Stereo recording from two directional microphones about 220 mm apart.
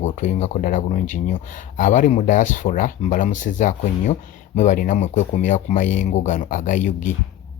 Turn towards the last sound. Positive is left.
turn(degrees=35)  # may be behind; listen again after turning